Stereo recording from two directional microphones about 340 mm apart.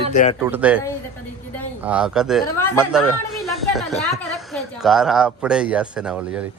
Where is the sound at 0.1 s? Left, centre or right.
Left.